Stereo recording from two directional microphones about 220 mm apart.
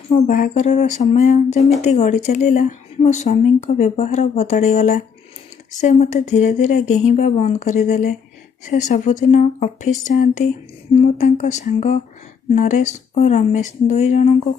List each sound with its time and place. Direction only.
0.3 s speech: 35° left (ahead or behind)